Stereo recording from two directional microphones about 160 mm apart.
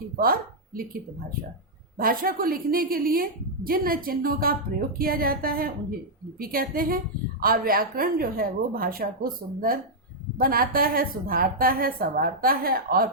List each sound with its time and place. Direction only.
0.2 s a woman's voice: 65° right (ahead or behind)
2.0 s a woman's voice: 65° right (ahead or behind)